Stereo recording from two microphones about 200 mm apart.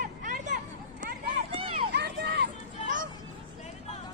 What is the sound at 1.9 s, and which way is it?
Run, 55° right (ahead or behind).